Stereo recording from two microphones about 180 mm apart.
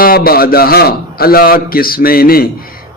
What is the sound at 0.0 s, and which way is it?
A man's voice, 55° left (ahead or behind).